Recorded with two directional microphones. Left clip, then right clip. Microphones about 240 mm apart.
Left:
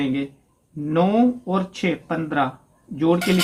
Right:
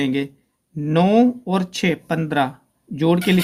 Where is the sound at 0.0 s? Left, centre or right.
Right.